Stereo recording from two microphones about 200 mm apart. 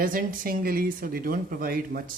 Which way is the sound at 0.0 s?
45° right (ahead or behind).